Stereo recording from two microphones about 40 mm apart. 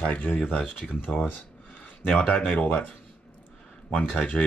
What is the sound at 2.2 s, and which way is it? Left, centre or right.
Speech, left.